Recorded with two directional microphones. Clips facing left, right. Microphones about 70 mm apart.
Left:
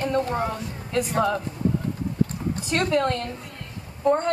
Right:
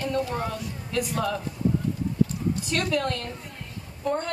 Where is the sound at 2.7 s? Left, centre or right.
Left.